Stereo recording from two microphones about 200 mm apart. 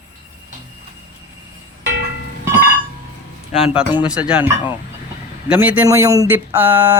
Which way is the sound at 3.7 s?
5° right (ahead or behind).